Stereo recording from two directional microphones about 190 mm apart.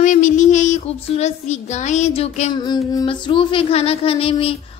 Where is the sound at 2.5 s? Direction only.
20° left (ahead or behind).